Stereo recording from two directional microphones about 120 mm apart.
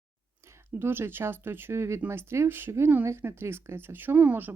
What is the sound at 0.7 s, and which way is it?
Speech, 20° right (ahead or behind).